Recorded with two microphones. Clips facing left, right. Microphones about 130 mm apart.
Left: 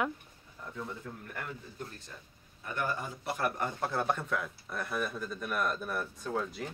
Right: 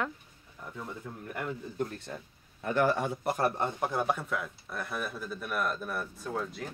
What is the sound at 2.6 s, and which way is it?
Speech, 90° right.